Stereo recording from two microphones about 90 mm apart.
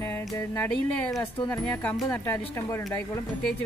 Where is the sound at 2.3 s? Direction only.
30° left (ahead or behind).